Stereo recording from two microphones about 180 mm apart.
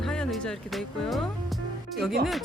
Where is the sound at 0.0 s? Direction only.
5° left (ahead or behind).